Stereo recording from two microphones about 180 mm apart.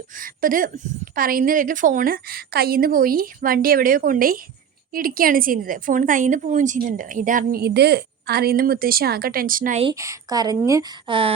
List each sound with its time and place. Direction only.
0.2 s a woman's voice: 50° right (ahead or behind)
9.9 s speech: 15° right (ahead or behind)